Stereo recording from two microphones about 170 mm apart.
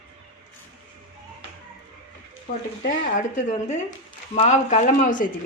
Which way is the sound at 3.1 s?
45° left (ahead or behind).